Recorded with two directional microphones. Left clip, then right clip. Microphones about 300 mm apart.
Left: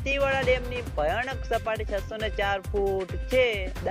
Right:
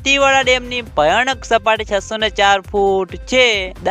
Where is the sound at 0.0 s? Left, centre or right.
Right.